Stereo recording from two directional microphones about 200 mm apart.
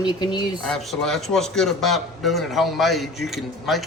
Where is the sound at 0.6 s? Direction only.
Centre (ahead or behind).